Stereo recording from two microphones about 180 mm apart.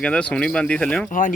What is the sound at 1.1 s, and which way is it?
Speech, 50° left (ahead or behind).